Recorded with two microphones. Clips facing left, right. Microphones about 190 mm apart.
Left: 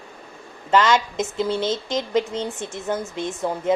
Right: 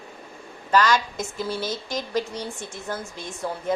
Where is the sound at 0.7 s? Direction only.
20° left (ahead or behind).